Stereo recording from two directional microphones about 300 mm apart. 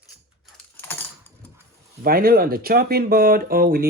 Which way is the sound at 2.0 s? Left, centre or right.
Right.